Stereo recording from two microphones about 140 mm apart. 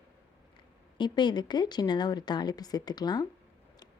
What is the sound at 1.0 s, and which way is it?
A woman's voice, 35° left (ahead or behind).